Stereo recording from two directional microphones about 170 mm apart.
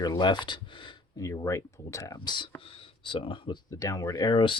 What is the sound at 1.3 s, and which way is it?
Speech, 20° left (ahead or behind).